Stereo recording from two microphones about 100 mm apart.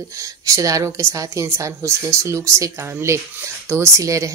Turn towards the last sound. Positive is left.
turn(degrees=-30)  # may be behind; listen again after turning